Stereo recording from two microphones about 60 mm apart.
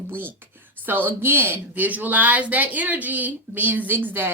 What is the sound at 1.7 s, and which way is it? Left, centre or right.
Speech, right.